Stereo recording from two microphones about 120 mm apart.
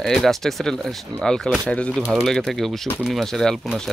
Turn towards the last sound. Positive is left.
turn(degrees=0)  # may be behind; listen again after turning